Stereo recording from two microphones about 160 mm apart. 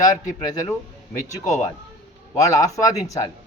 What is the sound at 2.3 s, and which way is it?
Speech, 20° left (ahead or behind).